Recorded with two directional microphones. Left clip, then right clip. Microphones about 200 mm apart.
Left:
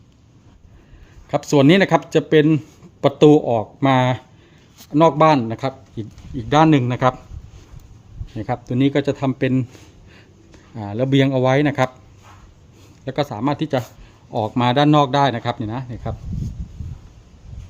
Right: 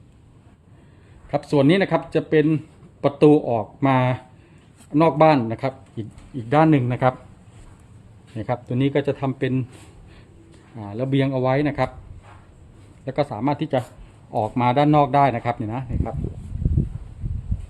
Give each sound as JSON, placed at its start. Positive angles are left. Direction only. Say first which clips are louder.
{"t": 1.3, "sound": "speech", "louder": "left 4 dB", "side_deg": 25}
{"t": 8.4, "sound": "speech", "louder": "left 3 dB", "side_deg": 10}
{"t": 10.8, "sound": "speech", "louder": "left 5 dB", "side_deg": 30}
{"t": 13.1, "sound": "speech", "louder": "left 1 dB", "side_deg": 15}